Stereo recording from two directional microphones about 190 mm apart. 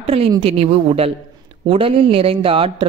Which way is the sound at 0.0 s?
30° right (ahead or behind).